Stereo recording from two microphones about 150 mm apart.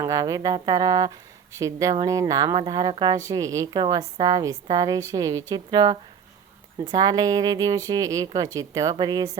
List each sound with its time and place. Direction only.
0.0 s a woman's voice: 20° right (ahead or behind)